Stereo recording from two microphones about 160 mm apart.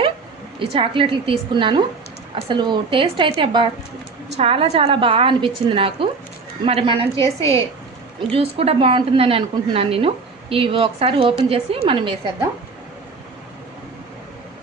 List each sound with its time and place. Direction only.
0.6 s a woman's voice: 35° right (ahead or behind)